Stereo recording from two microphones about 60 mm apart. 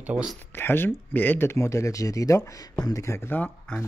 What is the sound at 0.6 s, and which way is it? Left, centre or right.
Speech, left.